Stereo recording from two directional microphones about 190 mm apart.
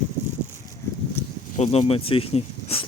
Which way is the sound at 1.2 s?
10° left (ahead or behind).